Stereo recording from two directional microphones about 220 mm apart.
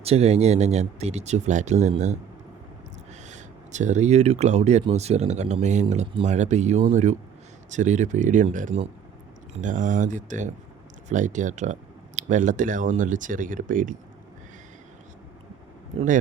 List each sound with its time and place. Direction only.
0.0 s speech: 30° right (ahead or behind)
3.2 s speech: 35° right (ahead or behind)